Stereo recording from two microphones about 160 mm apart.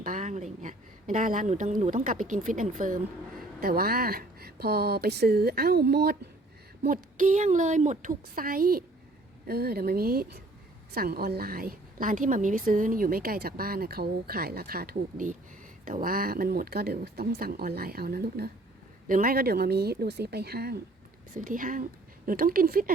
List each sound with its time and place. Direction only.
0.0 s a woman's voice: 55° right (ahead or behind)
3.6 s a woman's voice: 70° right (ahead or behind); by 6.1 s 90° right
6.8 s a woman's voice: 60° right (ahead or behind)
9.5 s a woman's voice: 75° right (ahead or behind)
19.0 s a woman's voice: 60° right (ahead or behind)
21.3 s a woman's voice: 55° right (ahead or behind)